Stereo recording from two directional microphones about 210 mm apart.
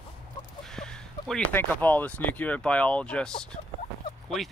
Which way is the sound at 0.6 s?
5° left (ahead or behind).